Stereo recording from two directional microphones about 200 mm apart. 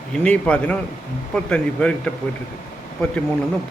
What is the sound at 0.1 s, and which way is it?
A man's voice, 5° left (ahead or behind).